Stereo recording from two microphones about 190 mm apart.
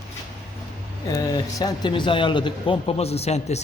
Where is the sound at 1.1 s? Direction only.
20° left (ahead or behind).